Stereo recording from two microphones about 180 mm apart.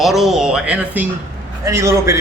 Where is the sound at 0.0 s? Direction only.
Centre (ahead or behind).